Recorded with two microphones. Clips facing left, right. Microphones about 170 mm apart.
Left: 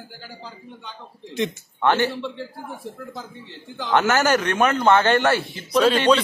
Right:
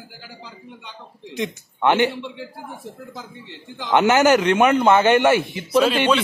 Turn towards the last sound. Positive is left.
turn(degrees=-5)  # may be behind; listen again after turning